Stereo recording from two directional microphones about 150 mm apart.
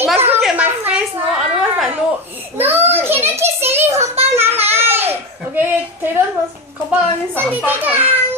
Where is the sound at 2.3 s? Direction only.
15° right (ahead or behind).